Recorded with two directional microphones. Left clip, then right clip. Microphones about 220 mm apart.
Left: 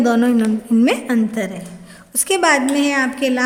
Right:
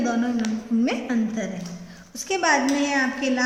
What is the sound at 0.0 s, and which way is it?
A woman's voice, 50° left (ahead or behind).